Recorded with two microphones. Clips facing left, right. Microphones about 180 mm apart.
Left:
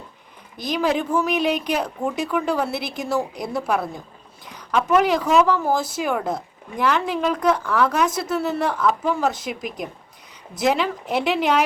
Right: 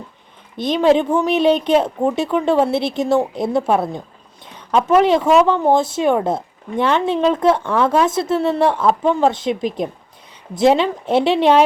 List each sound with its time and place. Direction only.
0.5 s a woman's voice: 25° right (ahead or behind)